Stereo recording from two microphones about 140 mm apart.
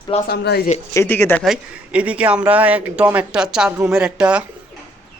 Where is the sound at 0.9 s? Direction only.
20° left (ahead or behind).